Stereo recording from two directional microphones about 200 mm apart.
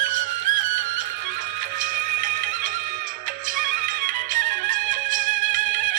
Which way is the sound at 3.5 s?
45° right (ahead or behind).